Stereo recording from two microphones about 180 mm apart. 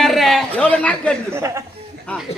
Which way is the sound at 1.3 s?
15° right (ahead or behind).